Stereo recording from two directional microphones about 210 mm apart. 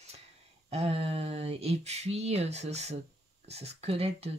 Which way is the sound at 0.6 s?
30° right (ahead or behind).